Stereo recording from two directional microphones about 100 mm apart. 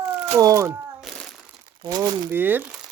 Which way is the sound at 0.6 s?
25° right (ahead or behind).